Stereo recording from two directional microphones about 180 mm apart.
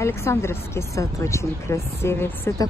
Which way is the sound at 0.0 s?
15° left (ahead or behind).